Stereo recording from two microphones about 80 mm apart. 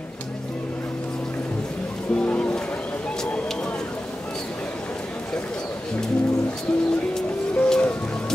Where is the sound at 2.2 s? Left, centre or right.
Centre.